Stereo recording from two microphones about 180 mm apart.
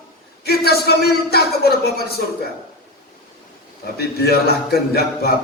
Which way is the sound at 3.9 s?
60° left (ahead or behind).